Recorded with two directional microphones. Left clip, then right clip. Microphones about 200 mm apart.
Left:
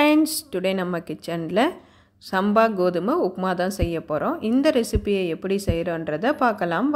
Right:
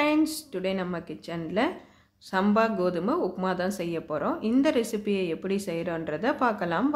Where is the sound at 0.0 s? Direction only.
35° left (ahead or behind).